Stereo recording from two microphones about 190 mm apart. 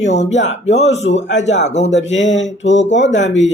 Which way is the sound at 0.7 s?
35° left (ahead or behind).